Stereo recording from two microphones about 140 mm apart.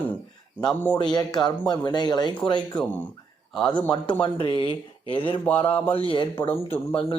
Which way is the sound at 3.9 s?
35° left (ahead or behind).